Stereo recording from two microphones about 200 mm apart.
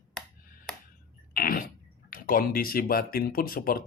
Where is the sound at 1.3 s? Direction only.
45° left (ahead or behind).